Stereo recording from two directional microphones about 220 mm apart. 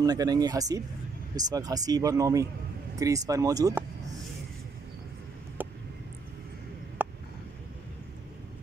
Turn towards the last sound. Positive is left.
turn(degrees=-10)  # may be behind; listen again after turning